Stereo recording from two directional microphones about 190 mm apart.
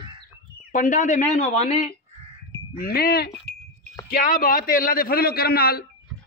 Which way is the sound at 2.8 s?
50° left (ahead or behind).